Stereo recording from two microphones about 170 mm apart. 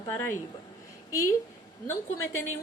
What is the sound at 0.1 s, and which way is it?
Speech, 15° left (ahead or behind).